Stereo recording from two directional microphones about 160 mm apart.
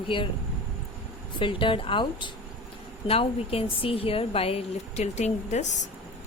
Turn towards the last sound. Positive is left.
turn(degrees=45)  # may be behind; listen again after turning